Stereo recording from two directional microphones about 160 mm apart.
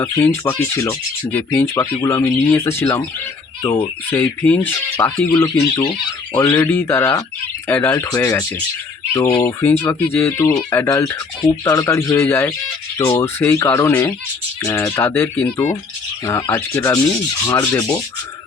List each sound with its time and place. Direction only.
0.0 s speech: 15° left (ahead or behind)
4.1 s speech: 10° left (ahead or behind)